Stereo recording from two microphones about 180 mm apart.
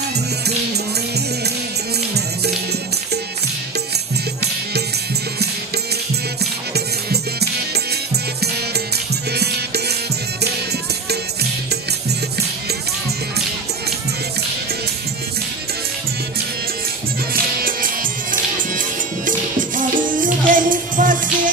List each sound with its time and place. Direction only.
6.4 s music: 65° right (ahead or behind)
11.7 s music: 65° right (ahead or behind)
17.3 s music: 50° right (ahead or behind)